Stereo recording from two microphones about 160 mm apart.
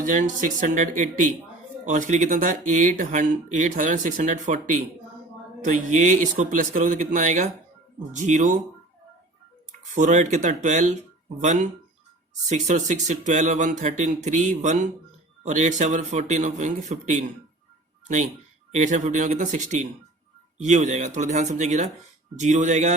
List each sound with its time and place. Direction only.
0.0 s speech: 55° right (ahead or behind)
9.9 s speech: 50° right (ahead or behind)
18.7 s speech: 50° right (ahead or behind)